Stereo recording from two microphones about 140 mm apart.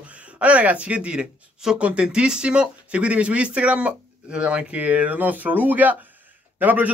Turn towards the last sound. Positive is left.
turn(degrees=-10)  # may be behind; listen again after turning